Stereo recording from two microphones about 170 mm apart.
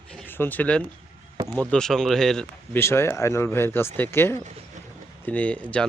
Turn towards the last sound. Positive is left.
turn(degrees=5)  # may be behind; listen again after turning